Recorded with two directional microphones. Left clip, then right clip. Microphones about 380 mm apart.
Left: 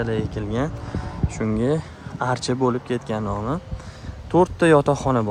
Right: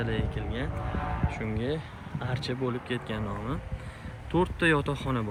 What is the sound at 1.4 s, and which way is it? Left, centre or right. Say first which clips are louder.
Speech: left 12 dB; left.